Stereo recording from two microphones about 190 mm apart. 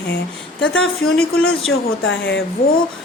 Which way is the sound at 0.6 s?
90° left.